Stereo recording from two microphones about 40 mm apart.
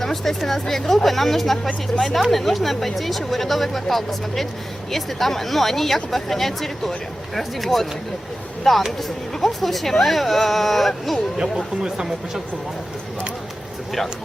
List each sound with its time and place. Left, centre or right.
0.0 s speech: centre
11.5 s speech: centre